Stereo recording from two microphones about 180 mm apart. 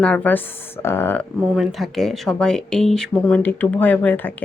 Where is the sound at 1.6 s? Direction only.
Centre (ahead or behind).